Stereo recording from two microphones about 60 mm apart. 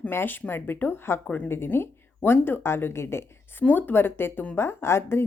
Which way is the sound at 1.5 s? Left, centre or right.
Left.